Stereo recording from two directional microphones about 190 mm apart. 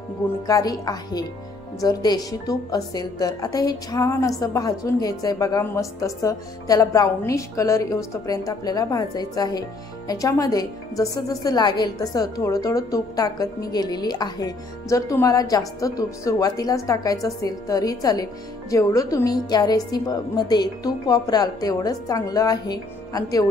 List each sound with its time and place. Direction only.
0.5 s a woman's voice: 20° left (ahead or behind)